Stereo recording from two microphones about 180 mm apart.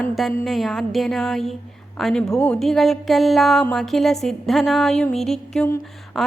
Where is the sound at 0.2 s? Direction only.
Centre (ahead or behind).